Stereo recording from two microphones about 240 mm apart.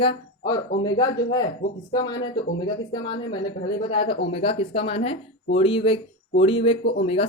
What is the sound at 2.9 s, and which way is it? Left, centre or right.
Speech, centre.